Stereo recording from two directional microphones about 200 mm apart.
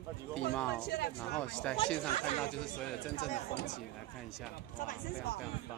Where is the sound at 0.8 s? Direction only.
55° left (ahead or behind).